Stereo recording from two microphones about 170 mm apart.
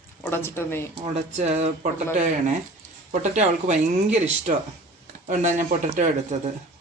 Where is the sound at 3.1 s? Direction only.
45° right (ahead or behind).